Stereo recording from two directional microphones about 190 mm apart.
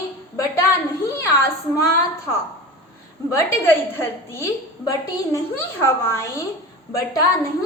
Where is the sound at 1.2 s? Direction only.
15° left (ahead or behind).